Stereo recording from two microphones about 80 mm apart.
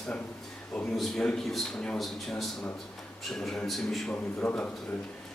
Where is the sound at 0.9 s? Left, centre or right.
Centre.